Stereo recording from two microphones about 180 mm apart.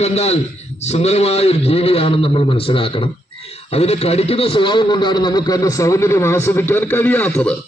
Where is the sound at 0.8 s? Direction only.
35° left (ahead or behind).